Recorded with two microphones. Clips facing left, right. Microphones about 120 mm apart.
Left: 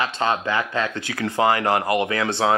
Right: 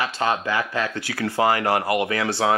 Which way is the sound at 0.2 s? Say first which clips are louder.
Even; 25° left (ahead or behind).